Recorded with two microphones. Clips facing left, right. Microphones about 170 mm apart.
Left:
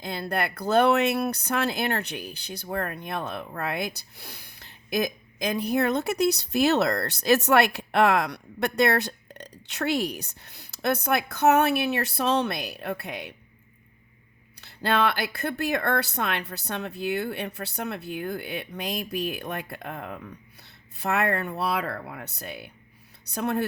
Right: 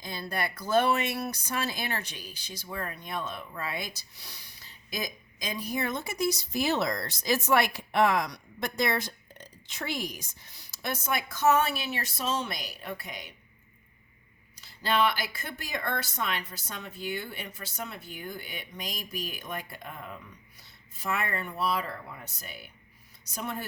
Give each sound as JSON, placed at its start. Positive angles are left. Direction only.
{"t": 0.0, "sound": "speech", "side_deg": 60}
{"t": 14.5, "sound": "speech", "side_deg": 65}